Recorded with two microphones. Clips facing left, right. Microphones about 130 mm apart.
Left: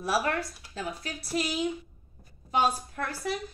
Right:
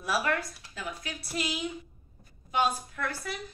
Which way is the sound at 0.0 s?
35° left (ahead or behind).